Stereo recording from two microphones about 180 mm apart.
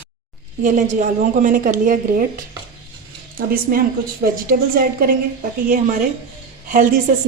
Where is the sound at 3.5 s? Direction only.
55° right (ahead or behind).